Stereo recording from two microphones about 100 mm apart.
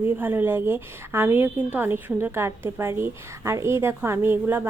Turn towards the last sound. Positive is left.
turn(degrees=-20)  # may be behind; listen again after turning